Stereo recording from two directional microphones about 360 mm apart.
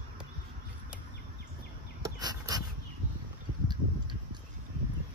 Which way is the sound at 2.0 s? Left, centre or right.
Centre.